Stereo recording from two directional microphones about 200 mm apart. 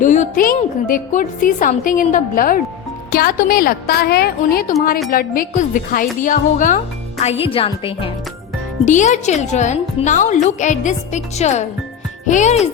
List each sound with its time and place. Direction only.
0.0 s a woman's voice: 40° left (ahead or behind)
8.8 s a woman's voice: 40° left (ahead or behind)